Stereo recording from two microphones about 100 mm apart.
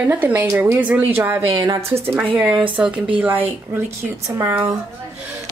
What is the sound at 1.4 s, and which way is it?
Speech, 45° right (ahead or behind).